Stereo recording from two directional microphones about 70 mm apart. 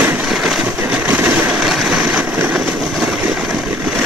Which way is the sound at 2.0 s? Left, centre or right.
Right.